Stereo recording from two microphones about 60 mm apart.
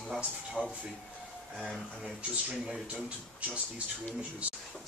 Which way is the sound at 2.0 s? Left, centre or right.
Centre.